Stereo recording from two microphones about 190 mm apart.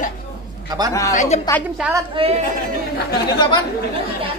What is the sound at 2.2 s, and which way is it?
Speech, 30° right (ahead or behind).